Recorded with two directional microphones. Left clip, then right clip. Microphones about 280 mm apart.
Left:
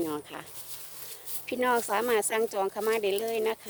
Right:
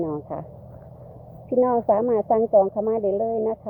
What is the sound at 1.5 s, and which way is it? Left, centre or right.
Speech, left.